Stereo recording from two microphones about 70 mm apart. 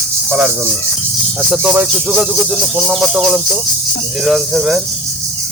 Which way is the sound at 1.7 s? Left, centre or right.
Right.